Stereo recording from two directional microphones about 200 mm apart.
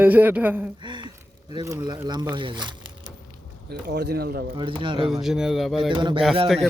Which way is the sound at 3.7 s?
55° right (ahead or behind).